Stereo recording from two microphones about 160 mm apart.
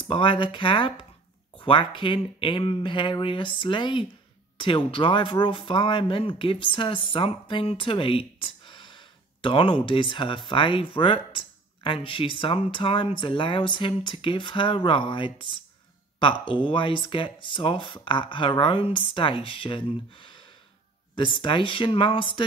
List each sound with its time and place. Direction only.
0.0 s speech: 30° left (ahead or behind)